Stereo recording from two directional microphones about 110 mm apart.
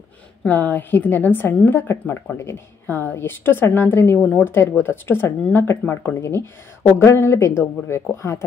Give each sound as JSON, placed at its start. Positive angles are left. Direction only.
{"t": 0.5, "sound": "a woman's voice", "side_deg": 15}